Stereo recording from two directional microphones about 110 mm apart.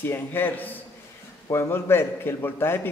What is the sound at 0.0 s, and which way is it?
A man's voice, 20° left (ahead or behind).